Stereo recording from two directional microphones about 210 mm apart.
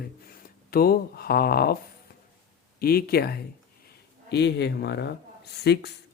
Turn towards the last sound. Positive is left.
turn(degrees=50)  # may be behind; listen again after turning